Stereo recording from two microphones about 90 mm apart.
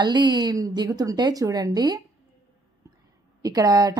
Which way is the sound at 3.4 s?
40° right (ahead or behind).